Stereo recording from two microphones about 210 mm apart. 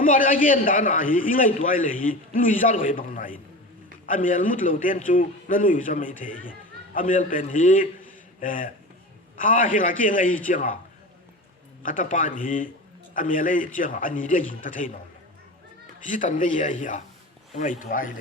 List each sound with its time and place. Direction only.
0.0 s a man's voice: 40° left (ahead or behind)
11.8 s a man's voice: 40° left (ahead or behind)
16.0 s a man's voice: 40° left (ahead or behind)